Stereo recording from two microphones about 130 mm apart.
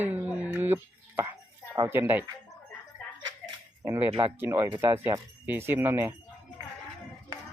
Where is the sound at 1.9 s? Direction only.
15° right (ahead or behind).